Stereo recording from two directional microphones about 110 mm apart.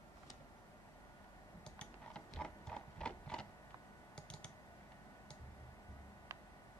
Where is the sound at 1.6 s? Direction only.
10° left (ahead or behind).